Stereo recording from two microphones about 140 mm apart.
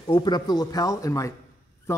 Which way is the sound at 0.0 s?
35° left (ahead or behind).